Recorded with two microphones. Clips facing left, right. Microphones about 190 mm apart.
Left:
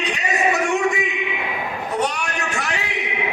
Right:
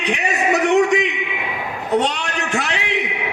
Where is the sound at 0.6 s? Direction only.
80° right.